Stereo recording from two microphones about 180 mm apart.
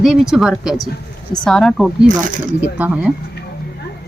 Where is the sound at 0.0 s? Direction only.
5° right (ahead or behind).